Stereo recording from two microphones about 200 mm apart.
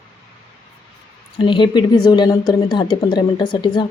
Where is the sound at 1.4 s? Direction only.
25° left (ahead or behind).